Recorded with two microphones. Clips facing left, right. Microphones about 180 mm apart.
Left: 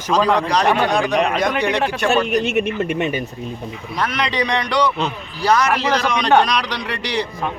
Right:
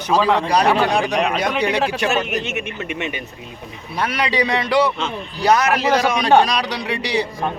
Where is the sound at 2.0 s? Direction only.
40° left (ahead or behind).